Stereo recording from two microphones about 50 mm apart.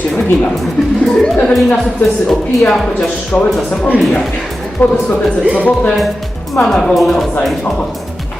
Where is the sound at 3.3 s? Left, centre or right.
Left.